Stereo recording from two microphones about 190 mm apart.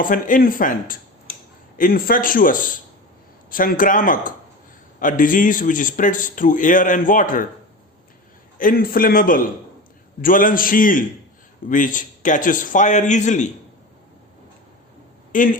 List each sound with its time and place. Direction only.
0.0 s a man's voice: 45° left (ahead or behind)
8.5 s a man's voice: 50° left (ahead or behind)
15.3 s a man's voice: 45° left (ahead or behind)